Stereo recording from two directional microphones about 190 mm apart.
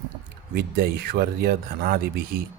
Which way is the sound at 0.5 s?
55° right (ahead or behind).